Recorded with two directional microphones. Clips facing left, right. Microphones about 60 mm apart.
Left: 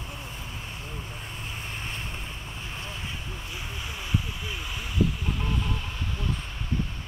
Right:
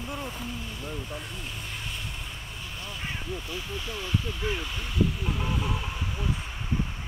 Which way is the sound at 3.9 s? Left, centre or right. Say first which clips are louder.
Even; centre.